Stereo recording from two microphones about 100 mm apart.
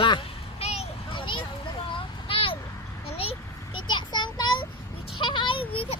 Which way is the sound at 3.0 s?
75° left (ahead or behind).